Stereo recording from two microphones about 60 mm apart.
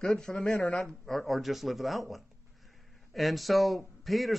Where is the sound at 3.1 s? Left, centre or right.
Centre.